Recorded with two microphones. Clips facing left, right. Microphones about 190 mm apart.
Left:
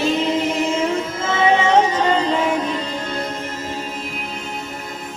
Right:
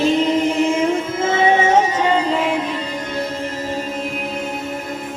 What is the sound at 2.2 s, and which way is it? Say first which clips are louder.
Music: even; centre (ahead or behind).